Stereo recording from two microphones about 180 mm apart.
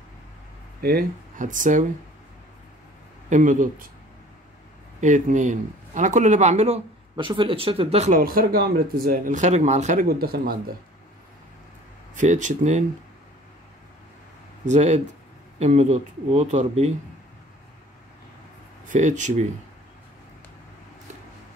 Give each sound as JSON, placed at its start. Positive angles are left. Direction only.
{"t": 0.7, "sound": "speech", "side_deg": -55}
{"t": 3.3, "sound": "speech", "side_deg": -45}
{"t": 5.0, "sound": "speech", "side_deg": -45}
{"t": 8.1, "sound": "speech", "side_deg": -55}
{"t": 10.0, "sound": "speech", "side_deg": -55}
{"t": 12.2, "sound": "speech", "side_deg": -45}
{"t": 14.7, "sound": "speech", "side_deg": -40}
{"t": 18.9, "sound": "speech", "side_deg": -40}